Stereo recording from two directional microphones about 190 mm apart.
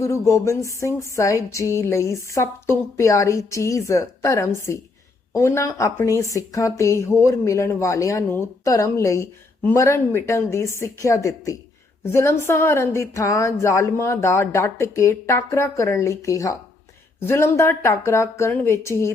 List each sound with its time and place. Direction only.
0.0 s a woman's voice: 15° left (ahead or behind)